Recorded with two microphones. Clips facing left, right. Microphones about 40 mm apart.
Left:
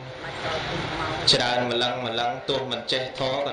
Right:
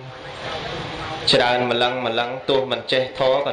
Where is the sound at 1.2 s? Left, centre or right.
Right.